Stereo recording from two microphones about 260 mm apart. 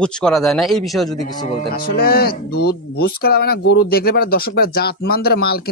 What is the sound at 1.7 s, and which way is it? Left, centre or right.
Speech, left.